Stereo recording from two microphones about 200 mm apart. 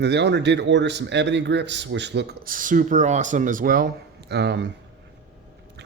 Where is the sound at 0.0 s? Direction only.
55° right (ahead or behind).